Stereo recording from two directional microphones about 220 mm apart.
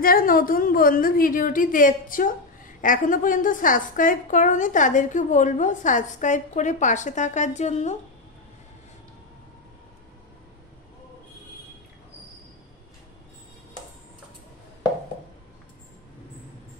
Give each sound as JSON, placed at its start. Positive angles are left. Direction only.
{"t": 0.0, "sound": "a woman's voice", "side_deg": 40}